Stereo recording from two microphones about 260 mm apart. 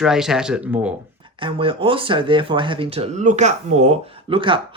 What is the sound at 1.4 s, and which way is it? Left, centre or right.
Speech, centre.